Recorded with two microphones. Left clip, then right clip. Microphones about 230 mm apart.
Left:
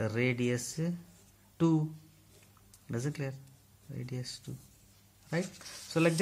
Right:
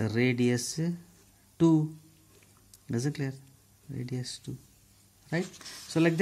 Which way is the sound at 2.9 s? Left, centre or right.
Right.